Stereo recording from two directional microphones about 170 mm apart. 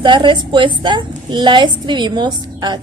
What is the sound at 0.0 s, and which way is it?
A woman's voice, 30° right (ahead or behind).